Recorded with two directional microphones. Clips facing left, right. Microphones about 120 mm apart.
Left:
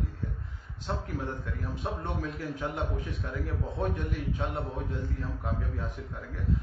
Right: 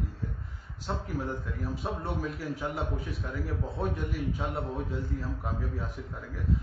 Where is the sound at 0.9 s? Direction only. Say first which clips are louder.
Right 1 dB; 5° right (ahead or behind).